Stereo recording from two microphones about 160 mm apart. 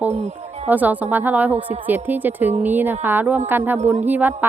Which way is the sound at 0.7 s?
10° right (ahead or behind).